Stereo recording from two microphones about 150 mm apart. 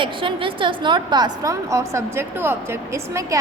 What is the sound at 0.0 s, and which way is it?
A woman's voice, 35° right (ahead or behind).